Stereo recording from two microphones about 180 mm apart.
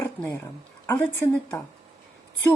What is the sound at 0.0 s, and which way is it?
Dog, 15° left (ahead or behind).